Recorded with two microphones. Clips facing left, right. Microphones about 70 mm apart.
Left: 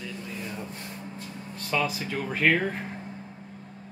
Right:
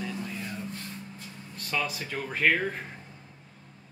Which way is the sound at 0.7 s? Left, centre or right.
Left.